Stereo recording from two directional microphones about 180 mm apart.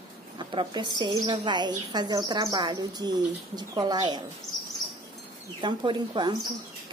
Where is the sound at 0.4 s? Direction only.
25° right (ahead or behind).